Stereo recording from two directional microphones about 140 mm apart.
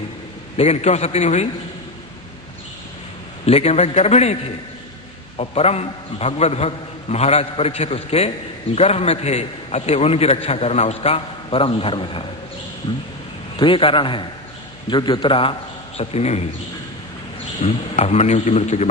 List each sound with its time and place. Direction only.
0.5 s a man's voice: 50° left (ahead or behind)
3.4 s a man's voice: 45° left (ahead or behind)
5.4 s a man's voice: 50° left (ahead or behind)
13.6 s a man's voice: 40° left (ahead or behind)
16.0 s a man's voice: 50° left (ahead or behind)
17.6 s a man's voice: 50° left (ahead or behind)